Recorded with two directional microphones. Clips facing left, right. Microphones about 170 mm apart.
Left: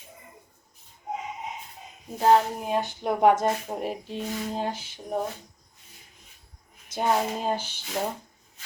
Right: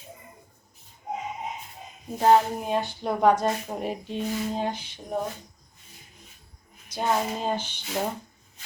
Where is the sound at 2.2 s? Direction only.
5° left (ahead or behind).